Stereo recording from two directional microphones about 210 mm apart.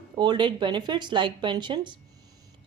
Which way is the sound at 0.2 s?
20° right (ahead or behind).